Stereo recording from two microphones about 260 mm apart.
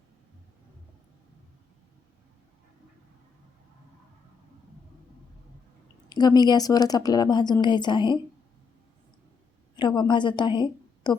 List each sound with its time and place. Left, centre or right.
6.1 s a woman's voice: centre
9.7 s a woman's voice: centre